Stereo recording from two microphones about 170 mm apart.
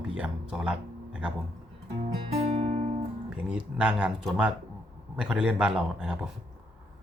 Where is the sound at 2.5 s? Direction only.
40° right (ahead or behind).